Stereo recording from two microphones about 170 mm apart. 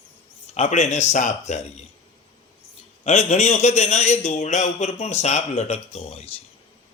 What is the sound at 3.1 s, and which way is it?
A man's voice, 40° left (ahead or behind).